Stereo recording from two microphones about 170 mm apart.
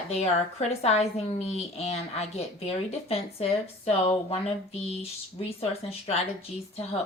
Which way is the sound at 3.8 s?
35° left (ahead or behind).